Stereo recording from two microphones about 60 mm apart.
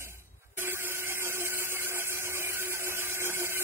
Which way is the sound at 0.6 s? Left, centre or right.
Right.